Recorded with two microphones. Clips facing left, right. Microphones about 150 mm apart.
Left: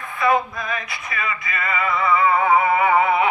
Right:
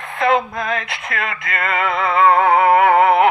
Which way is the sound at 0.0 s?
85° right.